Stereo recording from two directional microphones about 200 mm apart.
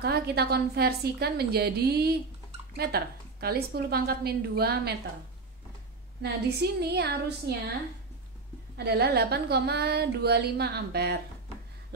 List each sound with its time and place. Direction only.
0.0 s speech: 50° right (ahead or behind)
6.2 s speech: 55° right (ahead or behind)
8.7 s speech: 55° right (ahead or behind)